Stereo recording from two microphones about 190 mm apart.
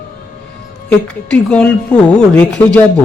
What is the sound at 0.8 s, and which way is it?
A woman's voice, 5° left (ahead or behind).